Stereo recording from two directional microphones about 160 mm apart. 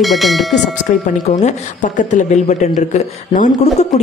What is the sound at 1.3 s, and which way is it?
Speech, 50° left (ahead or behind).